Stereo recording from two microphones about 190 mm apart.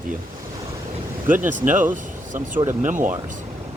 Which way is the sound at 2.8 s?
40° right (ahead or behind).